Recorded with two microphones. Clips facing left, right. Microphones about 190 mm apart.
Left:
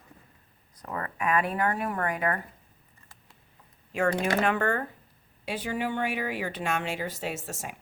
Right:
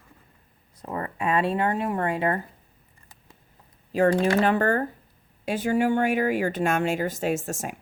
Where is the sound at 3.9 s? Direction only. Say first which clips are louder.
Right 6 dB; 35° right (ahead or behind).